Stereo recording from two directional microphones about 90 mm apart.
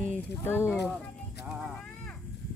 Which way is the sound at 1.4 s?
5° right (ahead or behind).